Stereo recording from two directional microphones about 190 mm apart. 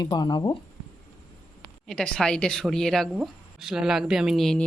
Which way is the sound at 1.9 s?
5° left (ahead or behind).